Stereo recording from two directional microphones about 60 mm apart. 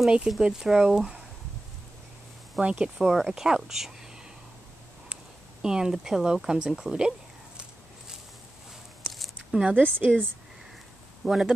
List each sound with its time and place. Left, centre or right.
0.0 s speech: centre
2.6 s a woman's voice: centre
3.0 s speech: centre
5.1 s speech: centre
9.1 s a sound: centre
9.9 s a woman's voice: right
11.2 s speech: centre